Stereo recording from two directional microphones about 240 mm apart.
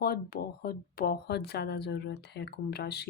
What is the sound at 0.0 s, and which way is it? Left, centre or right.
Speech, left.